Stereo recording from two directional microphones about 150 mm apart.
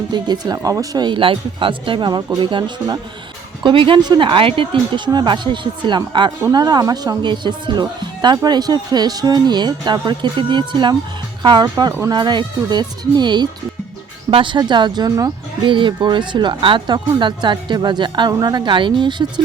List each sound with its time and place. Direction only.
0.1 s speech: 25° right (ahead or behind)